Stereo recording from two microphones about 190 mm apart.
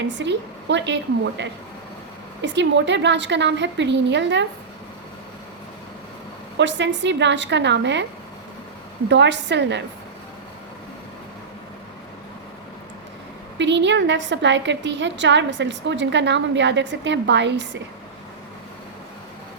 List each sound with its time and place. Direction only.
0.0 s a woman's voice: 65° right (ahead or behind)
6.6 s a woman's voice: 70° right (ahead or behind)
9.0 s a woman's voice: 65° right (ahead or behind)
13.6 s a woman's voice: 70° right (ahead or behind)